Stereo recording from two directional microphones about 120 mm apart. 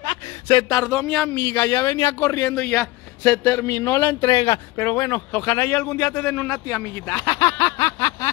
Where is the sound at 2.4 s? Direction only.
5° left (ahead or behind).